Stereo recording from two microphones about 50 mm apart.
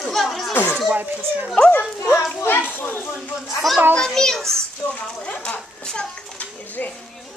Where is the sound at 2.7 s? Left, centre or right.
Left.